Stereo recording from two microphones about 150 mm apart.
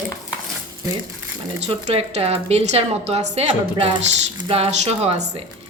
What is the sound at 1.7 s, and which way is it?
A woman's voice, 45° right (ahead or behind).